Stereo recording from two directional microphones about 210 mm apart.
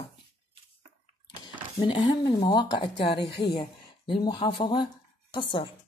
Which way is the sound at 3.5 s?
25° left (ahead or behind).